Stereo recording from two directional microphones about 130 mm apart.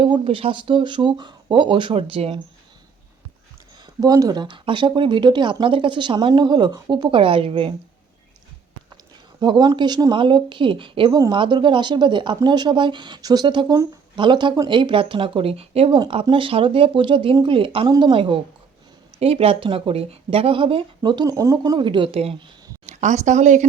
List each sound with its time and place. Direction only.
0.0 s speech: 45° right (ahead or behind)
4.0 s speech: 30° right (ahead or behind); by 7.7 s 45° right (ahead or behind)
9.4 s speech: 35° right (ahead or behind)
17.8 s speech: 35° right (ahead or behind)
22.9 s a woman's voice: 65° right (ahead or behind)